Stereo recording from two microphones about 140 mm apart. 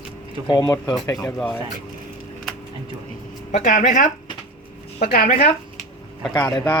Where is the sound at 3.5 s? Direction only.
65° left (ahead or behind).